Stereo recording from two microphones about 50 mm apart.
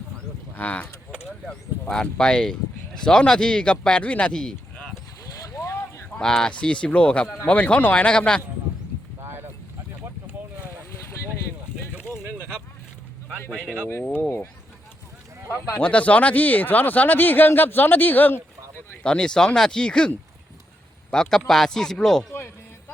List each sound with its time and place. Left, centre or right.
0.5 s speech: left
1.9 s speech: centre
6.1 s speech: centre
15.4 s speech: left
15.8 s speech: left
19.0 s speech: centre